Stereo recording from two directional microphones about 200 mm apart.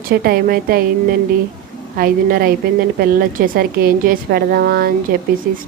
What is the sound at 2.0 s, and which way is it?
A woman's voice, 45° right (ahead or behind).